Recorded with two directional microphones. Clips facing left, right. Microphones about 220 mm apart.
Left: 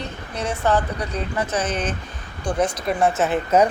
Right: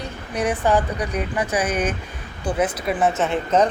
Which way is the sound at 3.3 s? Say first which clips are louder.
Left 1 dB; 10° left (ahead or behind).